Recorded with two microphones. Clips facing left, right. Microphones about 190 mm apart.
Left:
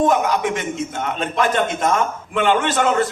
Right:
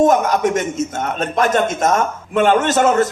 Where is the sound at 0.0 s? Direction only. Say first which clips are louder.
Right 4 dB; 45° right (ahead or behind).